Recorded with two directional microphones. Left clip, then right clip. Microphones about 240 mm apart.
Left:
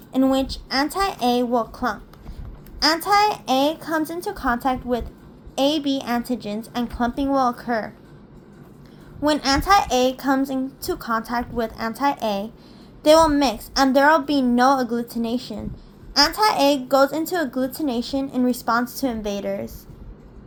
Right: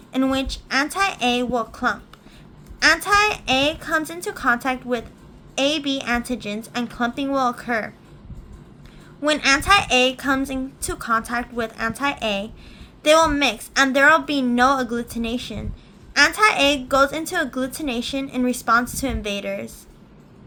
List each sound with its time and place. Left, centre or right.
0.1 s a child's voice: centre
9.2 s a child's voice: centre